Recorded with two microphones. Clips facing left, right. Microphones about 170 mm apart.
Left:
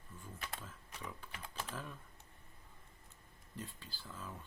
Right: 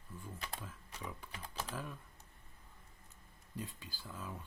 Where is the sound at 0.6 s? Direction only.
10° right (ahead or behind).